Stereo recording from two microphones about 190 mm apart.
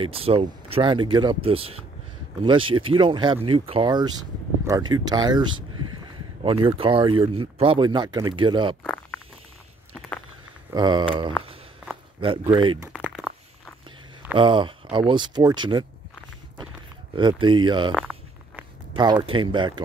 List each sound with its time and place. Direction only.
0.0 s speech: 30° right (ahead or behind)
8.8 s a sound: 5° left (ahead or behind)
10.7 s speech: 25° right (ahead or behind)
12.5 s speech: 25° right (ahead or behind)
12.9 s a sound: 5° right (ahead or behind)
14.3 s speech: 25° right (ahead or behind)
17.1 s speech: 25° right (ahead or behind)
18.9 s speech: 25° right (ahead or behind)